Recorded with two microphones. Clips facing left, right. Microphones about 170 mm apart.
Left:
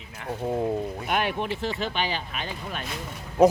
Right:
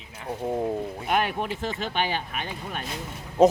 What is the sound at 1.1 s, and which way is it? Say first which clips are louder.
Speech: right 2 dB; 45° right (ahead or behind).